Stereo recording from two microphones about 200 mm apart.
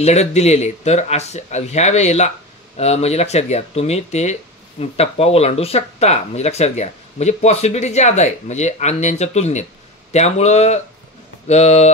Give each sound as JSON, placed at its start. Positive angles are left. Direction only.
{"t": 0.0, "sound": "speech", "side_deg": 35}